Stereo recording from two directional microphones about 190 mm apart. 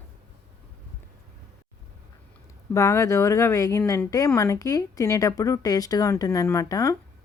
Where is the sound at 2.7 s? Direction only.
15° left (ahead or behind).